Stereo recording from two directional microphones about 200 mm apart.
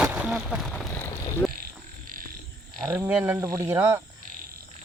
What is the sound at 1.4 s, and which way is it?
Frog, centre (ahead or behind).